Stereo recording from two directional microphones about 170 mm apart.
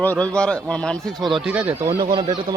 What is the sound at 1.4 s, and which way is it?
Speech, 10° right (ahead or behind).